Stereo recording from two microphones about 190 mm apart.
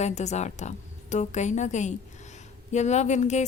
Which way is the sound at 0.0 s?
35° left (ahead or behind).